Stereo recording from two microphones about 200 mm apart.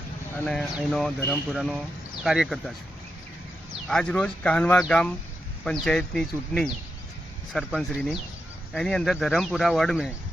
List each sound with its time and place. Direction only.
0.4 s speech: centre (ahead or behind)
3.8 s speech: 5° left (ahead or behind)